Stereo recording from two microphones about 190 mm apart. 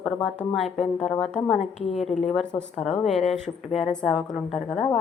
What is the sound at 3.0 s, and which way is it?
Speech, 35° left (ahead or behind).